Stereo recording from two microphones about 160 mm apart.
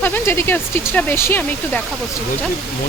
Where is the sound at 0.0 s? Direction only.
15° left (ahead or behind).